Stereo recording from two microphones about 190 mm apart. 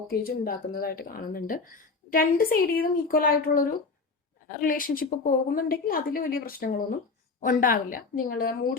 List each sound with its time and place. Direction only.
0.1 s a woman's voice: 50° left (ahead or behind)